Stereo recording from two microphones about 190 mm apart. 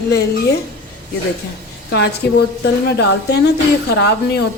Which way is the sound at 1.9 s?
60° left (ahead or behind).